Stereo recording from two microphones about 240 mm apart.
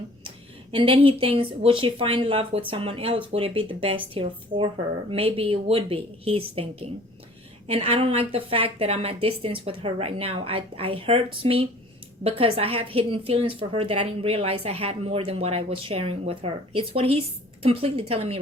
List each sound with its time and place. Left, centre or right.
0.3 s speech: right